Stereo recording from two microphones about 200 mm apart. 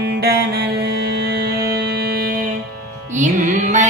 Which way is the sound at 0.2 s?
55° right (ahead or behind).